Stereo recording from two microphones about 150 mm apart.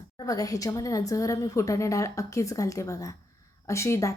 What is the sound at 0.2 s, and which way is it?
A woman's voice, 25° left (ahead or behind).